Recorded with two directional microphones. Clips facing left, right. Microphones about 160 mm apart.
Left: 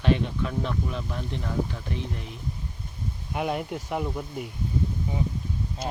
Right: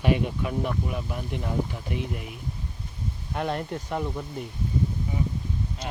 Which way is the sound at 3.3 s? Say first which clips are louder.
Left 1 dB; 5° left (ahead or behind).